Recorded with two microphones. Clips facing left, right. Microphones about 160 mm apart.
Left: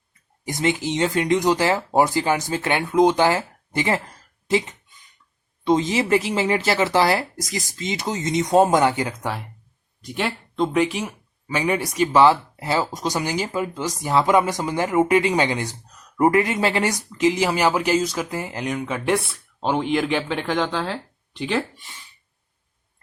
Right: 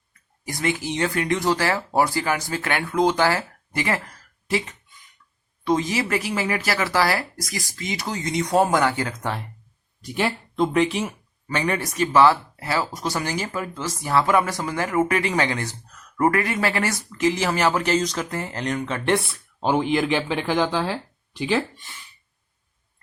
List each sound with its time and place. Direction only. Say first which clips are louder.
0.4 s speech: left 3 dB; 20° left (ahead or behind)
10.0 s speech: right 1 dB; 5° right (ahead or behind)
21.8 s speech: even; 20° left (ahead or behind)